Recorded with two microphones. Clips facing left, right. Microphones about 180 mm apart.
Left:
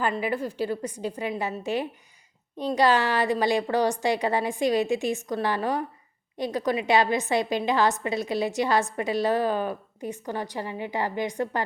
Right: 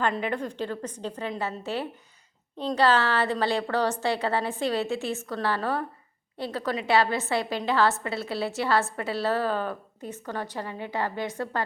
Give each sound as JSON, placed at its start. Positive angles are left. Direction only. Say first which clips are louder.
{"t": 0.0, "sound": "a woman's voice", "louder": "left 1 dB", "side_deg": 5}